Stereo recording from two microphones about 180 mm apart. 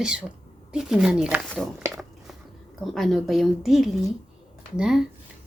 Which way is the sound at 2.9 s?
Centre (ahead or behind).